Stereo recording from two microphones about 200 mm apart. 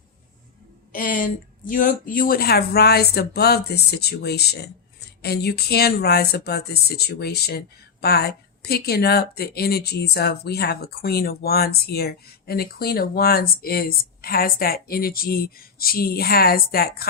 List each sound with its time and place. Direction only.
0.9 s a woman's voice: 45° left (ahead or behind)